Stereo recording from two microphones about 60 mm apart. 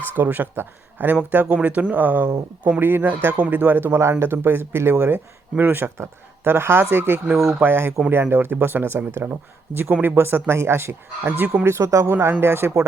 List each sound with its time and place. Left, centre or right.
0.2 s a man's voice: right
4.9 s a man's voice: right
11.3 s speech: right
11.6 s a man's voice: right
12.4 s a man's voice: right